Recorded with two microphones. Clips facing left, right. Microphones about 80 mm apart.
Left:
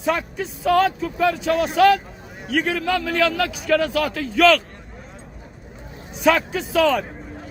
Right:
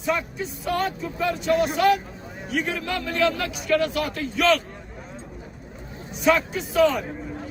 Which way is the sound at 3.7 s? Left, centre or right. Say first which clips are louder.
Left 2 dB; left.